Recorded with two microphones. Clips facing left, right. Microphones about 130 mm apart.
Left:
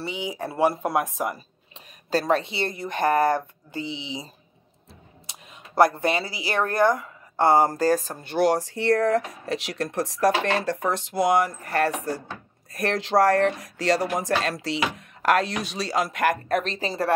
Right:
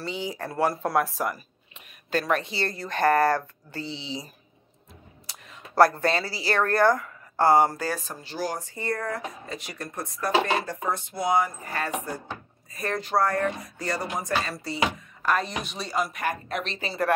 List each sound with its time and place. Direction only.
0.0 s speech: 15° left (ahead or behind); by 16.3 s 90° left
16.4 s speech: 45° left (ahead or behind)